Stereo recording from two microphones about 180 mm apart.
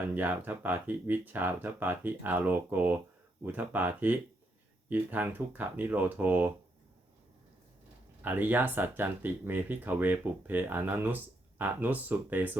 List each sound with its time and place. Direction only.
0.2 s speech: 10° right (ahead or behind)
8.2 s speech: 10° right (ahead or behind)